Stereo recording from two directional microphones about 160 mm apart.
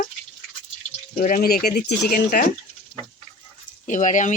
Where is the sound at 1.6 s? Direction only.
85° left; by 2.5 s 60° left (ahead or behind).